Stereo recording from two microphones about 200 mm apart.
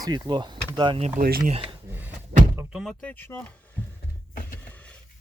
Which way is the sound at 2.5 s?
5° right (ahead or behind).